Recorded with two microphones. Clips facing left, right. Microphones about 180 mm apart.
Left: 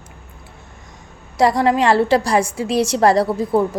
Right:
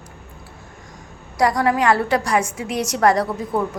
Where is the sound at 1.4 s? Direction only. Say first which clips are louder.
Left 3 dB; 25° left (ahead or behind).